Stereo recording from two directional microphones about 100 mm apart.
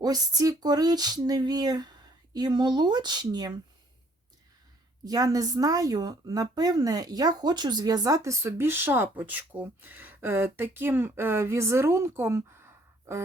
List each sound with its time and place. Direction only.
0.0 s speech: 40° right (ahead or behind)
5.0 s a woman's voice: 35° right (ahead or behind)